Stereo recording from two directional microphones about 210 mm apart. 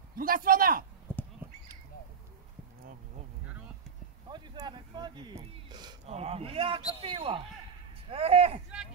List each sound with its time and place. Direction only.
0.2 s a man's voice: 45° right (ahead or behind)
1.1 s squawk: 10° left (ahead or behind)
4.3 s speech: 20° right (ahead or behind)